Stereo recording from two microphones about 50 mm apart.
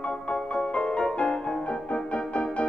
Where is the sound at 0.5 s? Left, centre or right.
Left.